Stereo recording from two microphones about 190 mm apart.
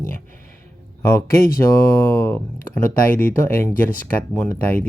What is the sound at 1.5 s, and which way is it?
Speech, 15° left (ahead or behind).